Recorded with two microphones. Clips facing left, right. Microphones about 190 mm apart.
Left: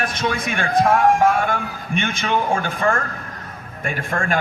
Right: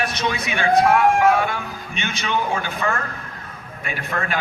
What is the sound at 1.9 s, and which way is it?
A man's voice, 50° left (ahead or behind).